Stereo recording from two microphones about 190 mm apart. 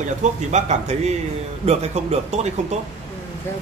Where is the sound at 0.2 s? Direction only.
35° right (ahead or behind).